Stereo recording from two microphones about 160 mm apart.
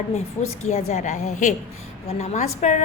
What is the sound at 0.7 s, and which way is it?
A woman's voice, 45° left (ahead or behind).